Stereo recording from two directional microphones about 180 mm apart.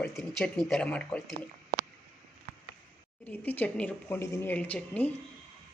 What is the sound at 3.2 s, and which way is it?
Speech, 10° left (ahead or behind).